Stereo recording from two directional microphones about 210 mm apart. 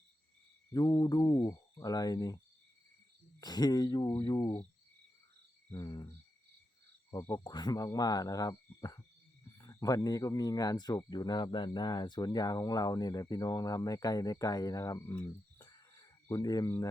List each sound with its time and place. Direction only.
0.7 s speech: 20° left (ahead or behind)
3.4 s speech: 20° left (ahead or behind)
5.7 s speech: 20° left (ahead or behind)
7.1 s speech: 15° left (ahead or behind)